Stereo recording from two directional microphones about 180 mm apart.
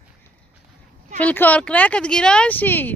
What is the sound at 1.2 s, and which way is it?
Speech, 10° left (ahead or behind).